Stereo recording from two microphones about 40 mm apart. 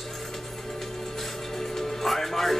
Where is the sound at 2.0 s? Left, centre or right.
Centre.